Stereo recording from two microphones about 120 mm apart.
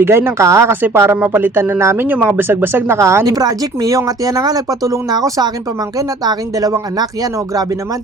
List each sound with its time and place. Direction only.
0.0 s speech: 20° right (ahead or behind)